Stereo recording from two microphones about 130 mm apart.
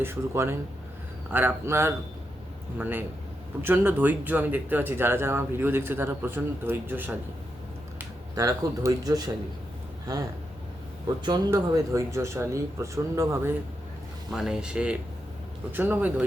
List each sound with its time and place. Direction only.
0.0 s speech: 20° right (ahead or behind)
8.4 s speech: 25° right (ahead or behind)
11.3 s speech: 30° right (ahead or behind)
14.3 s speech: 5° right (ahead or behind)